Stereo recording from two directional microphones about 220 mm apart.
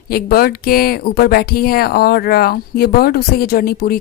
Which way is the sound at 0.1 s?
45° left (ahead or behind).